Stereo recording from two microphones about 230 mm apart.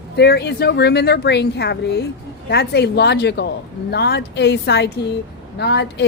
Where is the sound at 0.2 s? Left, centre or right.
Left.